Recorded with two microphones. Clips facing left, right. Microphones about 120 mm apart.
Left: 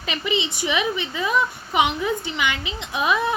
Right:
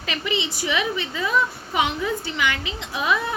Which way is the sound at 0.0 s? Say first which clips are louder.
Left 1 dB; 20° left (ahead or behind).